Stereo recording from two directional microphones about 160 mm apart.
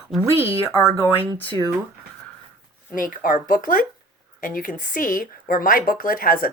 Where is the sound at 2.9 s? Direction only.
60° left (ahead or behind).